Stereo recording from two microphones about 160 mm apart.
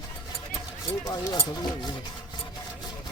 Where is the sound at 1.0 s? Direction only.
20° left (ahead or behind).